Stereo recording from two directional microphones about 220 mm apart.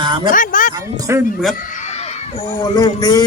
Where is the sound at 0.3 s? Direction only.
35° left (ahead or behind).